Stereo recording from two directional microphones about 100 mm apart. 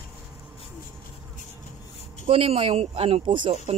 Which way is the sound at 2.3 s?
70° right (ahead or behind).